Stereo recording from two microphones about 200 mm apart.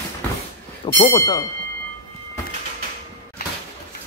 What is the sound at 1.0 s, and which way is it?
Speech, 20° left (ahead or behind).